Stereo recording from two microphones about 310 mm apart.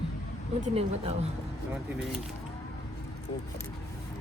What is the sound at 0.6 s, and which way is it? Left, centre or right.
Speech, centre.